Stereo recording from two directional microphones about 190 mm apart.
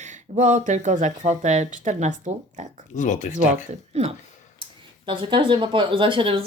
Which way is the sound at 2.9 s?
40° left (ahead or behind).